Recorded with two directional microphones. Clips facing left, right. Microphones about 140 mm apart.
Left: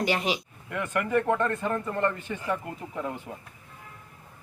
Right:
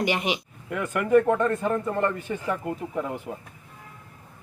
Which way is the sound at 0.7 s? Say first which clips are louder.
Right 6 dB; 5° right (ahead or behind).